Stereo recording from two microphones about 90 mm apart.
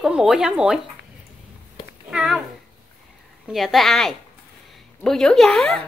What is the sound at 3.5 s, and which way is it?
Speech, centre (ahead or behind).